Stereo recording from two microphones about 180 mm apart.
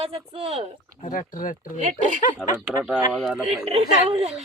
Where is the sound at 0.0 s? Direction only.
35° right (ahead or behind).